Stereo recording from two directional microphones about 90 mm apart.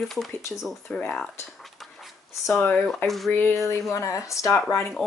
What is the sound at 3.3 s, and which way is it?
Speech, 20° left (ahead or behind).